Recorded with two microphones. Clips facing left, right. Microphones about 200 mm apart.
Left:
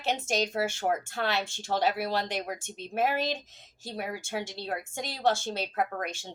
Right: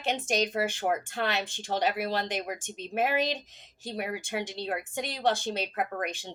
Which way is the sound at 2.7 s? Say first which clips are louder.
Right 1 dB; 15° right (ahead or behind).